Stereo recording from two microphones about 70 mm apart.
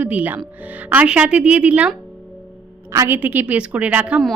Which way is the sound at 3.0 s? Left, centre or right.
Right.